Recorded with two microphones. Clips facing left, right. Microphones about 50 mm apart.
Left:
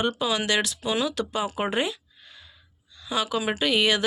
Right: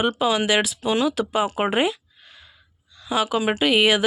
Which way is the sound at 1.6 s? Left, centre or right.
Centre.